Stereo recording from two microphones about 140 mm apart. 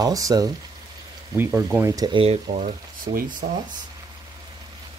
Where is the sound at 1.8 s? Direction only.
25° right (ahead or behind).